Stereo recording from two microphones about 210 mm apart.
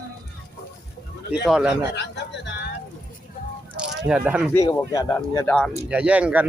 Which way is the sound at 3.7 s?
5° right (ahead or behind).